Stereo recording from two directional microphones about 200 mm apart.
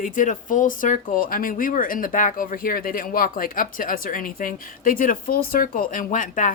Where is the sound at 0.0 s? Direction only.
40° left (ahead or behind).